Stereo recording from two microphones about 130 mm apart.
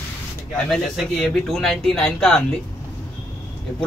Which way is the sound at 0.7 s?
Centre (ahead or behind).